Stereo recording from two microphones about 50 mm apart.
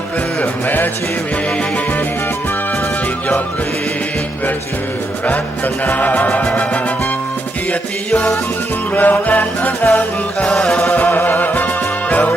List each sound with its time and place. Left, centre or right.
5.6 s music: left
9.0 s music: left